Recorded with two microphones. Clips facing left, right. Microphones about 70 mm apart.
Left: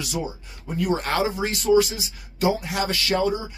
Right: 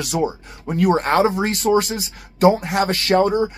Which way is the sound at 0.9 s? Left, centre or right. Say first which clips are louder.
Right 7 dB; right.